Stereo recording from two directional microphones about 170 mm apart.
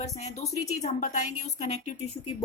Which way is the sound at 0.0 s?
40° left (ahead or behind).